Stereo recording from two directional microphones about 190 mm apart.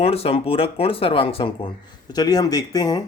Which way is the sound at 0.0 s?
30° left (ahead or behind).